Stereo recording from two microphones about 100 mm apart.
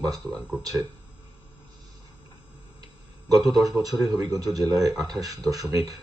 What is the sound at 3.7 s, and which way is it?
Speech, 40° right (ahead or behind).